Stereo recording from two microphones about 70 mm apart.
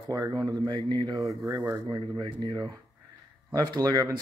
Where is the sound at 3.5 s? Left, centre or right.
Right.